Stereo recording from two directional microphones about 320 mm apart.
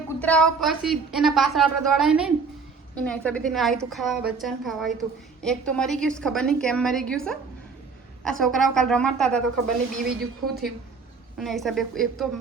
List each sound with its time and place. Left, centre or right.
0.1 s a woman's voice: centre
10.4 s a woman's voice: right
11.3 s a woman's voice: centre